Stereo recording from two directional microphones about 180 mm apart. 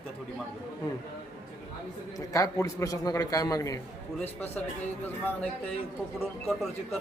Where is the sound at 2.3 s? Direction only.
20° left (ahead or behind).